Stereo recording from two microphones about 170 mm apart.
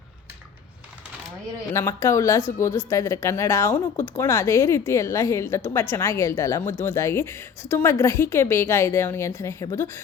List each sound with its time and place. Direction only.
1.7 s speech: 20° left (ahead or behind)